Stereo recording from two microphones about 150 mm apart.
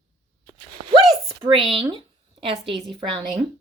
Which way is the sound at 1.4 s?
35° right (ahead or behind).